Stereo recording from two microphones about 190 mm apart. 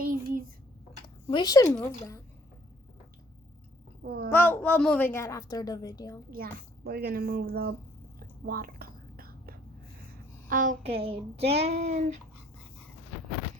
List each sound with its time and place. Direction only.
0.0 s a sound: 50° right (ahead or behind)
1.0 s speech: 25° left (ahead or behind)
4.0 s a sound: 55° right (ahead or behind)
4.3 s a woman's voice: 10° left (ahead or behind)
6.3 s a woman's voice: 50° right (ahead or behind)
8.4 s whispering: 50° right (ahead or behind)
10.5 s a woman's voice: 45° right (ahead or behind)